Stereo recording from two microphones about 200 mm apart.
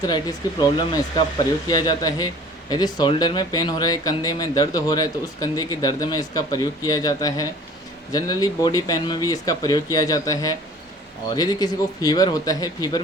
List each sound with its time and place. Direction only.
0.0 s a man's voice: 20° left (ahead or behind)